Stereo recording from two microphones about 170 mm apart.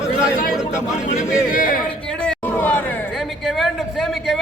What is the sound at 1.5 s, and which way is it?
Speech, 50° left (ahead or behind).